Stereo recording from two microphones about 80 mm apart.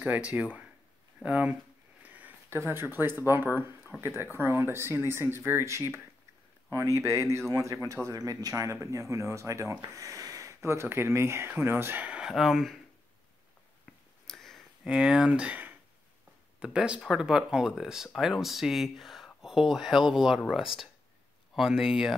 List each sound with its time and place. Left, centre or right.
0.0 s speech: centre
2.0 s a sound: centre
2.5 s speech: right
12.1 s speech: centre
14.2 s a sound: centre
14.9 s speech: centre